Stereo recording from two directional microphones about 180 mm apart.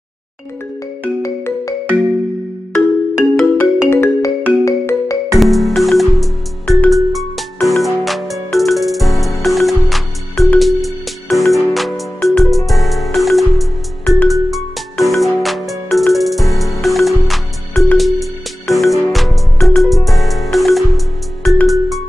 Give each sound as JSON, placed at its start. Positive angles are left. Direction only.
{"t": 1.0, "sound": "music", "side_deg": 15}
{"t": 3.2, "sound": "music", "side_deg": 10}
{"t": 5.4, "sound": "music", "side_deg": 0}